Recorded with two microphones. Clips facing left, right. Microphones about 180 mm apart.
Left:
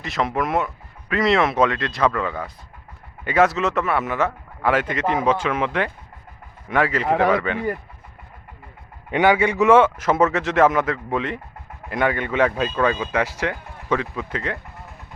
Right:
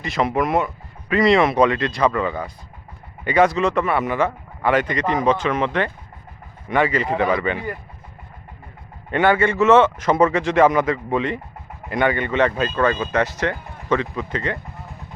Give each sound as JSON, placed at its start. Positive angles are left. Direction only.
{"t": 0.0, "sound": "speech", "side_deg": 0}
{"t": 7.1, "sound": "speech", "side_deg": 80}
{"t": 7.3, "sound": "speech", "side_deg": 0}
{"t": 9.0, "sound": "speech", "side_deg": 10}